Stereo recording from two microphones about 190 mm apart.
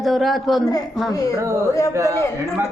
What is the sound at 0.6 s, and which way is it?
Speech, 20° left (ahead or behind).